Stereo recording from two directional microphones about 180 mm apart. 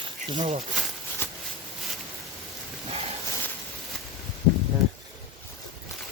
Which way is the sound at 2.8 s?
35° right (ahead or behind).